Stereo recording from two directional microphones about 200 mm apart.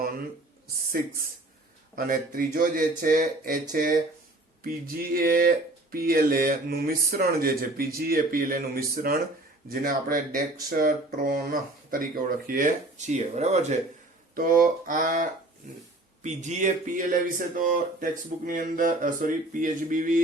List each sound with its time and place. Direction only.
2.0 s speech: 45° right (ahead or behind)